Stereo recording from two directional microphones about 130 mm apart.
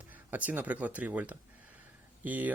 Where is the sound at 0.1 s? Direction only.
15° right (ahead or behind).